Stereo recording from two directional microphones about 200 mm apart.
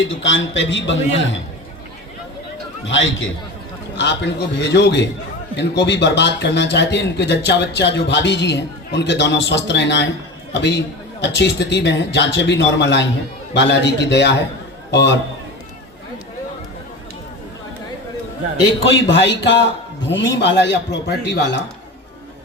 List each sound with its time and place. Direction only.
0.0 s a man's voice: 70° left (ahead or behind)
2.8 s a man's voice: 70° left (ahead or behind)
3.9 s a man's voice: 60° left (ahead or behind)
18.9 s a man's voice: 65° left (ahead or behind)